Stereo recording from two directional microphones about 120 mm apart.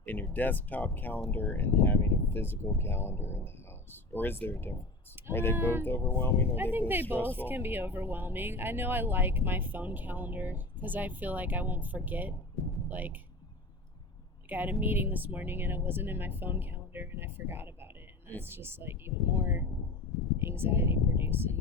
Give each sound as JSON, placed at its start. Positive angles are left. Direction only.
{"t": 0.0, "sound": "speech", "side_deg": 15}
{"t": 6.6, "sound": "speech", "side_deg": -15}
{"t": 7.2, "sound": "speech", "side_deg": 15}
{"t": 7.4, "sound": "speech", "side_deg": -15}
{"t": 14.5, "sound": "speech", "side_deg": -15}